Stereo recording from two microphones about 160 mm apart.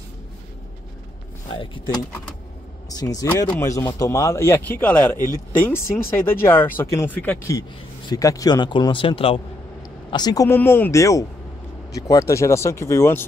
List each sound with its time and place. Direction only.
1.5 s a man's voice: 30° left (ahead or behind); by 5.1 s 10° left (ahead or behind)
5.1 s speech: 25° right (ahead or behind)
5.6 s a man's voice: 15° left (ahead or behind)
8.1 s speech: 20° left (ahead or behind)
10.1 s a man's voice: 25° left (ahead or behind)